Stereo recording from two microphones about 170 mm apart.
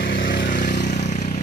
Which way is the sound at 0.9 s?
45° left (ahead or behind).